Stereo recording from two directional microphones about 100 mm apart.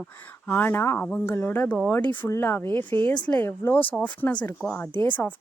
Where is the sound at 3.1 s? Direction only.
10° left (ahead or behind).